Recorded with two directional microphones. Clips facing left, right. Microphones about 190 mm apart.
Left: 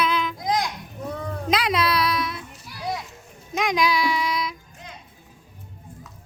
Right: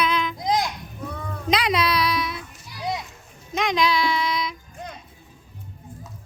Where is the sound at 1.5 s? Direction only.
5° left (ahead or behind).